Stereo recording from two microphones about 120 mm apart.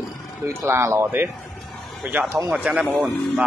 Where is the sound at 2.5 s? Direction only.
5° right (ahead or behind).